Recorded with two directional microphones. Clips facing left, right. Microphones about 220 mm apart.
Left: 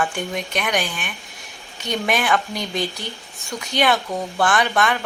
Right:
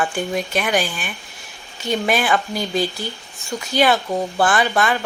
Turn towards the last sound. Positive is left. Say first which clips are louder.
# right 1 dB
turn(degrees=0)  # may be behind; listen again after turning